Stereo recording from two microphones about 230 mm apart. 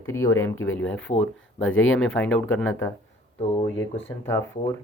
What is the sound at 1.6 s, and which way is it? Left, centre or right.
Speech, left.